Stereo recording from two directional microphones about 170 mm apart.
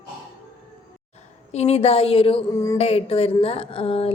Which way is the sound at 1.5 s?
40° left (ahead or behind).